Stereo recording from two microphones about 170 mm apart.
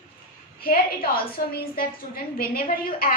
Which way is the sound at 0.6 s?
60° left (ahead or behind).